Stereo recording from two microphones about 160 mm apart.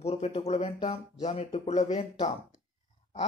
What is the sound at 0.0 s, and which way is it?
Speech, 40° left (ahead or behind).